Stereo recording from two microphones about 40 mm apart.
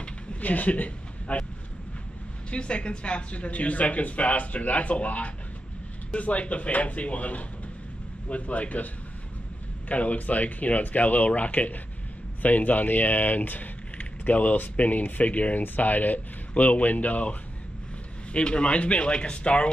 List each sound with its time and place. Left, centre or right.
0.4 s speech: left
2.5 s speech: left
15.6 s speech: left
18.3 s speech: left